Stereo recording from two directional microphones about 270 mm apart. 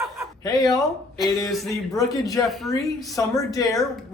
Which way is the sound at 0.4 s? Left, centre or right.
Centre.